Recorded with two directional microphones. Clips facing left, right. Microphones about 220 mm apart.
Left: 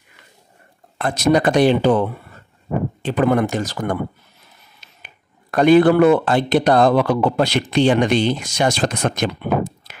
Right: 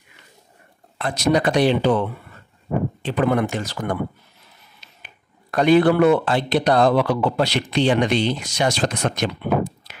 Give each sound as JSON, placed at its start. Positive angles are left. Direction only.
{"t": 0.9, "sound": "speech", "side_deg": 50}